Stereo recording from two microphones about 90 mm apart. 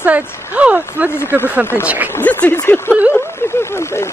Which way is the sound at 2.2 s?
15° left (ahead or behind).